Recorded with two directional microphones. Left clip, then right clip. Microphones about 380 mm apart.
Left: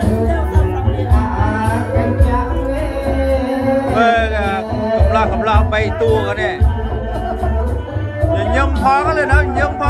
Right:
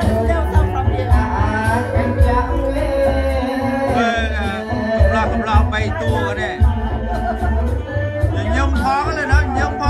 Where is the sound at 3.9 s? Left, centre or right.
Centre.